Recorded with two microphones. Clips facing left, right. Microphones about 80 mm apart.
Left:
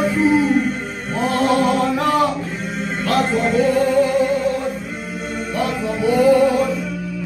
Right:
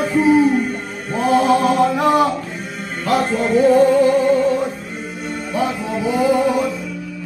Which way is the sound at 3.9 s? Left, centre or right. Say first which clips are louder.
Right 3 dB; centre.